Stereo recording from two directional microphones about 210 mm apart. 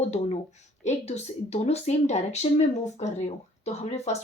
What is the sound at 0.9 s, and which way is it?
Speech, 30° left (ahead or behind).